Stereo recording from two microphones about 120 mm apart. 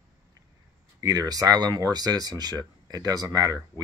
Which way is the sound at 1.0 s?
30° right (ahead or behind).